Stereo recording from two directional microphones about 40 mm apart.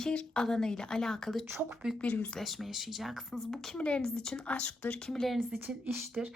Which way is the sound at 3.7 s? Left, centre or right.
Left.